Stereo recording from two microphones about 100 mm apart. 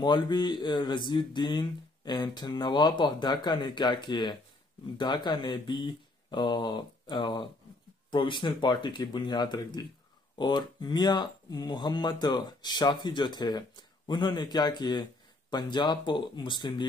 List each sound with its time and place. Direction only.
0.0 s speech: 45° left (ahead or behind)